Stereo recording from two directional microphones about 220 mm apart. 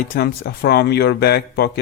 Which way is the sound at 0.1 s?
45° left (ahead or behind).